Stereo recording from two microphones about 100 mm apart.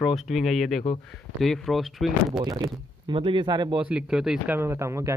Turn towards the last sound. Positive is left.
turn(degrees=-30)  # may be behind; listen again after turning